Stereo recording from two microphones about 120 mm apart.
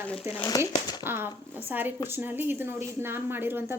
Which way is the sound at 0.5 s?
30° left (ahead or behind).